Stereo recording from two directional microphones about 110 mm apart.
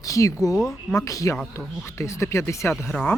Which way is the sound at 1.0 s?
30° left (ahead or behind).